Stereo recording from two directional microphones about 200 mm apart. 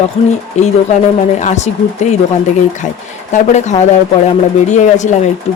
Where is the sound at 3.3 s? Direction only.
35° left (ahead or behind).